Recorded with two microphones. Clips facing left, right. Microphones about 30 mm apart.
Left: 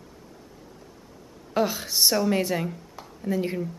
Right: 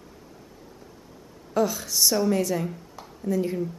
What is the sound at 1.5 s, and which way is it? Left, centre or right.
A woman's voice, left.